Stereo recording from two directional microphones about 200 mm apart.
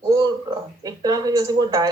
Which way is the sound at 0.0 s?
20° right (ahead or behind).